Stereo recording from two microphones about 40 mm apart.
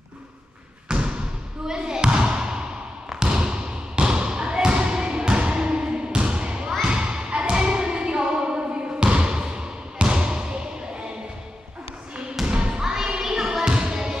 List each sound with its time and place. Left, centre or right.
0.8 s basketball bounce: right
6.8 s thump: right
9.0 s basketball bounce: right
12.4 s thump: right
12.9 s a sound: centre